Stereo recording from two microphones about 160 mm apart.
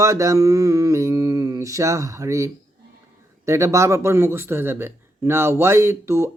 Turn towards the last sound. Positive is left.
turn(degrees=-15)  # may be behind; listen again after turning